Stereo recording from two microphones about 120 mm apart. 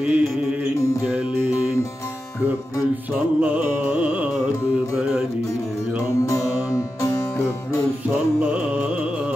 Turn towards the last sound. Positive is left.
turn(degrees=30)  # may be behind; listen again after turning